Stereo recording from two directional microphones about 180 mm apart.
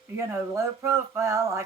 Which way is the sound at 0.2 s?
15° right (ahead or behind).